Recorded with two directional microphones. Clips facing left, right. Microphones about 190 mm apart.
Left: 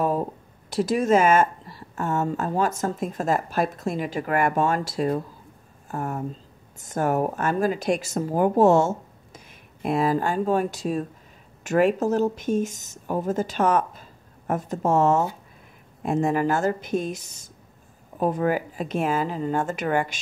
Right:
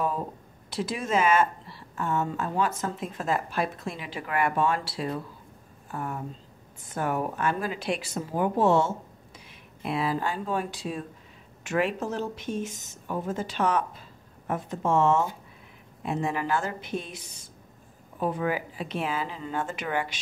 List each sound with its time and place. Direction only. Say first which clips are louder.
0.7 s a woman's voice: left 9 dB; 45° left (ahead or behind)